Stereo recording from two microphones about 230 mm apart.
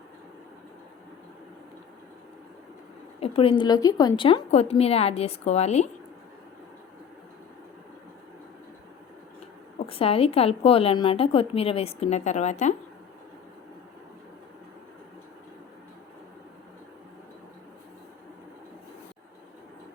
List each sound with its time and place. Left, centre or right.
3.2 s a sound: left
3.6 s a woman's voice: centre
9.7 s a woman's voice: left